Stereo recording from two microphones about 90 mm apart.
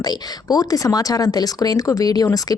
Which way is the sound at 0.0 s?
45° left (ahead or behind).